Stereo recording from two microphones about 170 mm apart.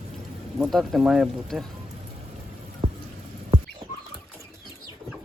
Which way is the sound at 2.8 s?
25° right (ahead or behind).